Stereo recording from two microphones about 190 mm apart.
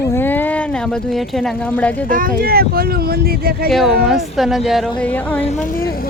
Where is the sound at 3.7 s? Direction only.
Centre (ahead or behind).